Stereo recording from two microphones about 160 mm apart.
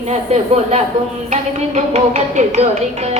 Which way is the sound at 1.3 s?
45° right (ahead or behind).